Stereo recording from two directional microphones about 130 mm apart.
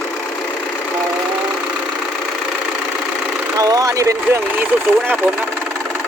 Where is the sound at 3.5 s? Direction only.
25° right (ahead or behind).